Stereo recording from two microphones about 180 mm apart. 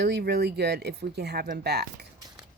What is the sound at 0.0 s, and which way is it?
Speech, 65° right (ahead or behind).